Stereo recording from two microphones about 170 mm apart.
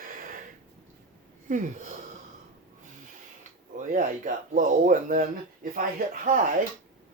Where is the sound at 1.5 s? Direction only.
50° right (ahead or behind).